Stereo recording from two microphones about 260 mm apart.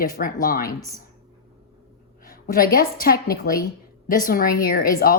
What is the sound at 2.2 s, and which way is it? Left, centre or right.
Speech, left.